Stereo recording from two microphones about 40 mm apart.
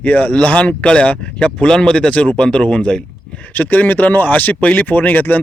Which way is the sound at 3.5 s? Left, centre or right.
Left.